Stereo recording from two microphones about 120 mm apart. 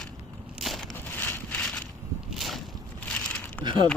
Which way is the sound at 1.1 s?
15° left (ahead or behind).